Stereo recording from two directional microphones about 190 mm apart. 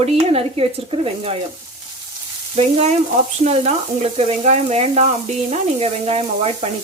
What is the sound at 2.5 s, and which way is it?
Speech, 35° right (ahead or behind).